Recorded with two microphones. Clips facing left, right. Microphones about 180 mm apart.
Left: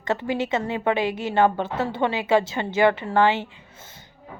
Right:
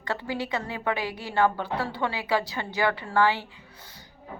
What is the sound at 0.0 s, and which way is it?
A woman's voice, 20° left (ahead or behind).